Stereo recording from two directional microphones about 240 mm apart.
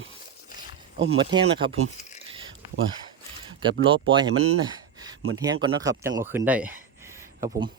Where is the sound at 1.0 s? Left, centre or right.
Right.